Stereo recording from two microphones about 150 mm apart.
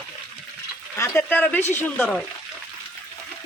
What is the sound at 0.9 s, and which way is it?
Speech, 15° left (ahead or behind).